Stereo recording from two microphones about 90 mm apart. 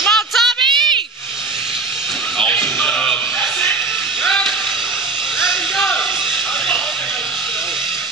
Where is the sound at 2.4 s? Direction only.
10° left (ahead or behind).